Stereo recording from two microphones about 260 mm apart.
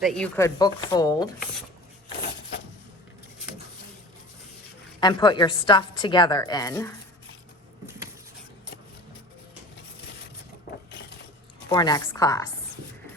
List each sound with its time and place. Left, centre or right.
0.0 s speech: centre
4.9 s speech: centre
7.9 s a sound: centre
11.7 s speech: centre